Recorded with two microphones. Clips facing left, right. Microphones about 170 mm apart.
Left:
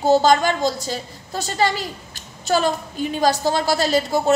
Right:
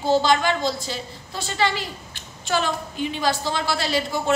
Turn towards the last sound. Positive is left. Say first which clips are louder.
# left 5 dB
turn(degrees=40)  # may be behind; listen again after turning